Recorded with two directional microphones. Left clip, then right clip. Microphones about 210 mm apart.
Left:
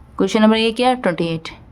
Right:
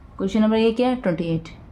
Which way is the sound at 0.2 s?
45° left (ahead or behind).